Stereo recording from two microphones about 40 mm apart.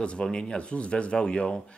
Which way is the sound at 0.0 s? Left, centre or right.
Left.